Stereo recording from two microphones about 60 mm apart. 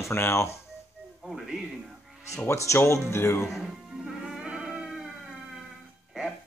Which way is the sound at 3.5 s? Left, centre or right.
Centre.